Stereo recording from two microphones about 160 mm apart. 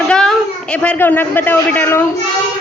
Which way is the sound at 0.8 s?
10° left (ahead or behind).